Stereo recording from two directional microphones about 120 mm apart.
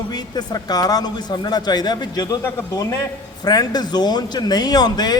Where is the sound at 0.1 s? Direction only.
35° left (ahead or behind).